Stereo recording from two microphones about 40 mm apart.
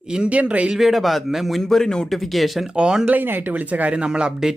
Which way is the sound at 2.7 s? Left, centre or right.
Right.